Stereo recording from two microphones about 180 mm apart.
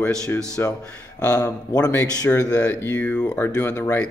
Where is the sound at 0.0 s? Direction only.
10° left (ahead or behind).